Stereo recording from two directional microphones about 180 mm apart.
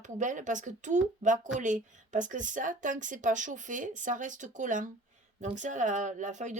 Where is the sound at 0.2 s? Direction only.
45° right (ahead or behind).